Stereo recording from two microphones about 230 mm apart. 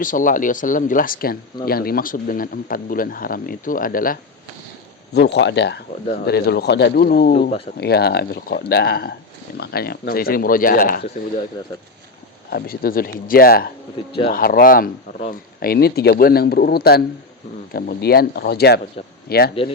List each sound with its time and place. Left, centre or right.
0.0 s speech: left
12.5 s speech: left